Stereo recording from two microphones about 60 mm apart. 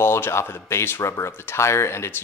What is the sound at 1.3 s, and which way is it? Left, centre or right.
Speech, left.